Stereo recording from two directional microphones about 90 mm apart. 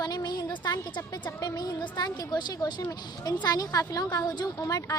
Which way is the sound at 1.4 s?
50° left (ahead or behind).